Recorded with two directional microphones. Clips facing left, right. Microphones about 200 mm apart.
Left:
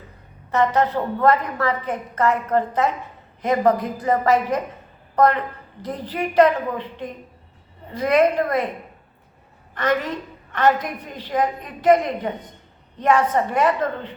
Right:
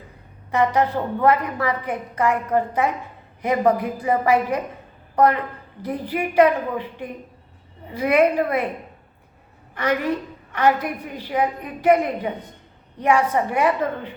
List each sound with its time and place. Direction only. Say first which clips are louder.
0.5 s a woman's voice: even; 10° right (ahead or behind)
9.7 s a woman's voice: even; 10° right (ahead or behind)